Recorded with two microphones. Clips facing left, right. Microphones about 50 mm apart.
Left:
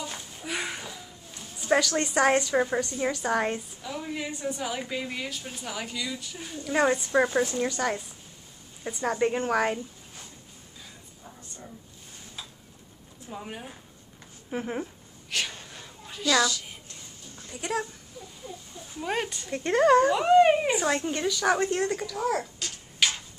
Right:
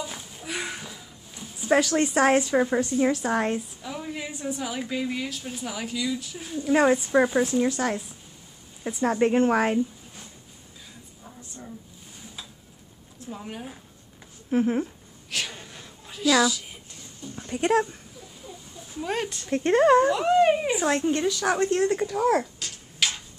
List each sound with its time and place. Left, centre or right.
0.0 s a sound: centre
1.8 s a woman's voice: centre
11.2 s a sound: centre
13.3 s a woman's voice: centre
14.5 s a sound: centre
17.5 s speech: right
18.9 s a woman's voice: centre
19.5 s speech: right
20.1 s a woman's voice: centre
20.7 s a woman's voice: centre
22.1 s speech: right
22.6 s a sound: centre